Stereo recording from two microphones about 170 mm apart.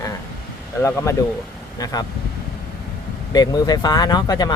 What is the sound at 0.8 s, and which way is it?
Speech, 15° left (ahead or behind).